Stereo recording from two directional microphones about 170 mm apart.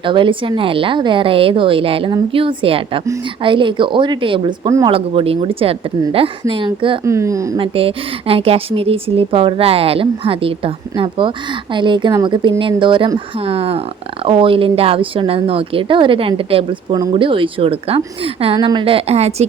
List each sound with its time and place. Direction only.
0.0 s a woman's voice: 30° right (ahead or behind)
4.9 s a woman's voice: 35° right (ahead or behind)
7.0 s a woman's voice: 15° right (ahead or behind)
7.6 s a woman's voice: 30° right (ahead or behind)